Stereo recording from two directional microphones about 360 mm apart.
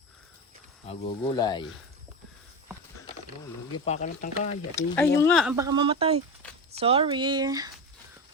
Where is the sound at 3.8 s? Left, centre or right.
Centre.